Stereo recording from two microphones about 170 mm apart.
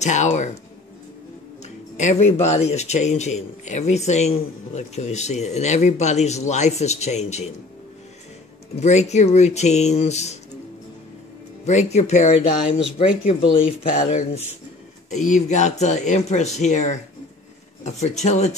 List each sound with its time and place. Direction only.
0.0 s speech: 45° left (ahead or behind)
2.0 s speech: 40° left (ahead or behind)
8.7 s speech: 40° left (ahead or behind)
11.6 s speech: 40° left (ahead or behind)